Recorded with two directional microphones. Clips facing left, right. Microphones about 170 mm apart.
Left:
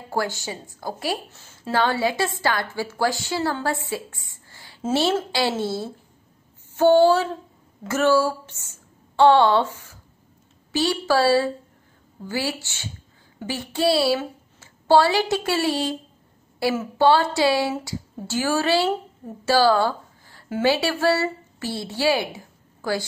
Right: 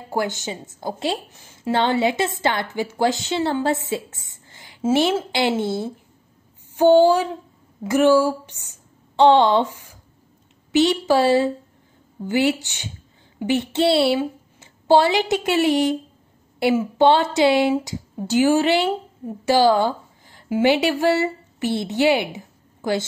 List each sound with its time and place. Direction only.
0.1 s a woman's voice: 20° right (ahead or behind)
6.8 s a sound: 15° right (ahead or behind)
7.8 s a woman's voice: 15° right (ahead or behind)